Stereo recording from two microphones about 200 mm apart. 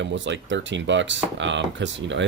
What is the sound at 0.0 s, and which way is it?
Speech, 65° right (ahead or behind).